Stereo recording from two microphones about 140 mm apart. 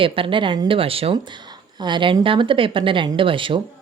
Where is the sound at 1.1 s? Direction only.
35° right (ahead or behind).